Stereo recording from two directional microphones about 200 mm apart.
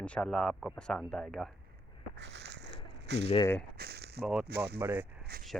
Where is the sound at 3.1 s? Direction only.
55° right (ahead or behind).